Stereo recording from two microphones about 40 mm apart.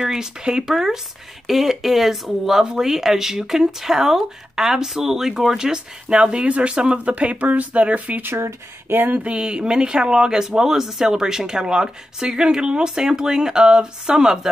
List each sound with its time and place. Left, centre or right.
0.0 s speech: centre; by 8.2 s right
8.2 s speech: right
9.1 s speech: right; by 14.5 s centre